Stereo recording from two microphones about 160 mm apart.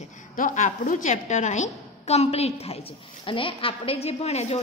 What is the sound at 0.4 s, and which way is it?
A woman's voice, 55° left (ahead or behind).